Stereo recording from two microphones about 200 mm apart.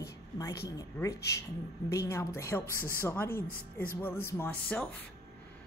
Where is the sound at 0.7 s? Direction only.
15° left (ahead or behind).